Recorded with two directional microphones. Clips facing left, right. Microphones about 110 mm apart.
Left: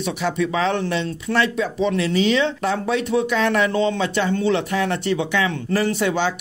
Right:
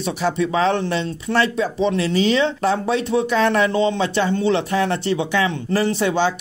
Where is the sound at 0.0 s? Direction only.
30° right (ahead or behind).